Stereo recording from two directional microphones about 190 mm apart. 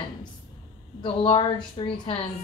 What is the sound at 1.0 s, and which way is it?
A woman's voice, 30° left (ahead or behind).